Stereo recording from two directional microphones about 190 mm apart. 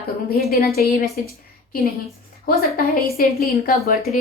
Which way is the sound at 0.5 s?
55° left (ahead or behind).